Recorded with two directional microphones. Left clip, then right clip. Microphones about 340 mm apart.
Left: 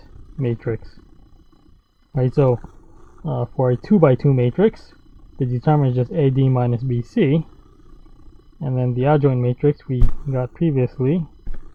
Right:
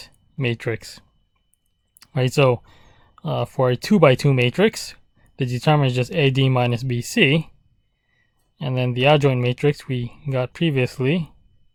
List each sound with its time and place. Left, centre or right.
0.3 s speech: right
2.1 s speech: right
8.5 s speech: right